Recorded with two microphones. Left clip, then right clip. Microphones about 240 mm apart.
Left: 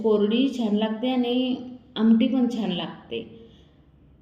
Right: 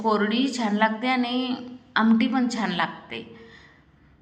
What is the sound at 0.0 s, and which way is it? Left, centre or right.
A woman's voice, right.